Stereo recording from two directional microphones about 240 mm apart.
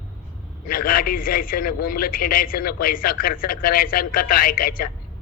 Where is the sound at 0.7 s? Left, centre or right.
Left.